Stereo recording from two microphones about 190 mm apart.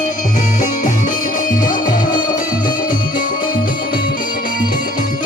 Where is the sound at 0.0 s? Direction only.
45° left (ahead or behind).